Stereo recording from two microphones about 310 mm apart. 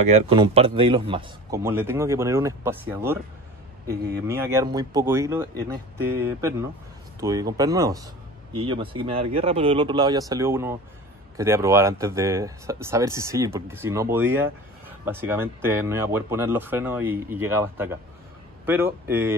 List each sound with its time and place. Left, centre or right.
0.1 s a man's voice: centre
3.8 s speech: right
4.3 s a man's voice: centre